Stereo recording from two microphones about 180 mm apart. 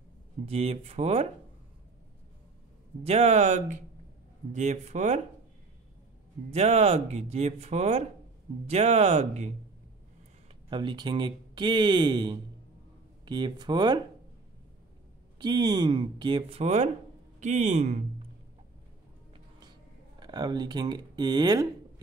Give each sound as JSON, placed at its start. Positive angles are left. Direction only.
{"t": 0.5, "sound": "speech", "side_deg": -35}
{"t": 3.0, "sound": "speech", "side_deg": -35}
{"t": 6.5, "sound": "speech", "side_deg": -35}
{"t": 10.7, "sound": "speech", "side_deg": -25}
{"t": 15.3, "sound": "speech", "side_deg": -25}
{"t": 20.2, "sound": "speech", "side_deg": -25}